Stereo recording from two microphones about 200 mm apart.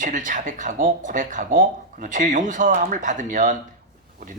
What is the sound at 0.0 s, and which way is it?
Speech, 40° right (ahead or behind).